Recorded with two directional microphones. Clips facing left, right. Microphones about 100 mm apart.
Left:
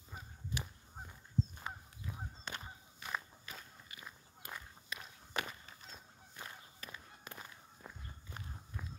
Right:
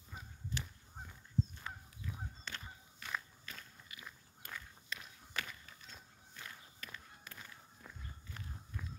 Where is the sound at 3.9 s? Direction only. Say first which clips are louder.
Even; 30° left (ahead or behind).